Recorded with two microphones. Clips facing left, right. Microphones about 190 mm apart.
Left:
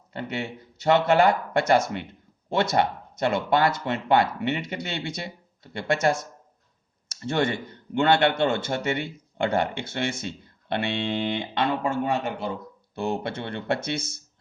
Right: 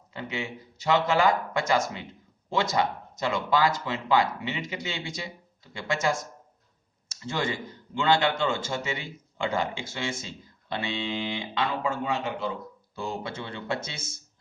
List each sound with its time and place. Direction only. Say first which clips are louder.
0.1 s speech: left 3 dB; 60° left (ahead or behind)
13.0 s speech: left 5 dB; 65° left (ahead or behind)